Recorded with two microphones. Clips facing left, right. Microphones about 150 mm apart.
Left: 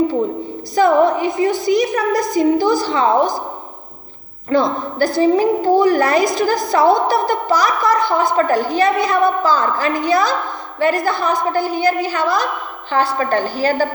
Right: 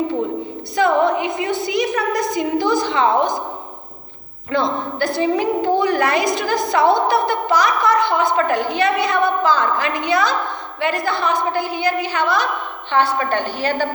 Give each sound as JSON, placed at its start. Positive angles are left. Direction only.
{"t": 0.8, "sound": "a woman's voice", "side_deg": 40}
{"t": 4.4, "sound": "a woman's voice", "side_deg": 40}